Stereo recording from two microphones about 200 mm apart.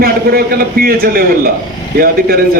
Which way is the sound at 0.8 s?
50° right (ahead or behind).